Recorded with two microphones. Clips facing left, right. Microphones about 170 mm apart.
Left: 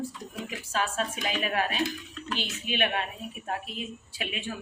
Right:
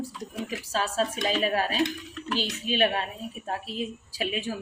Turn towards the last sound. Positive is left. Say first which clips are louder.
# right 5 dB
turn(degrees=-35)  # may be behind; listen again after turning